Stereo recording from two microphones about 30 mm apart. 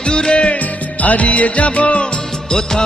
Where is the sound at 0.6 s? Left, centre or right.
Left.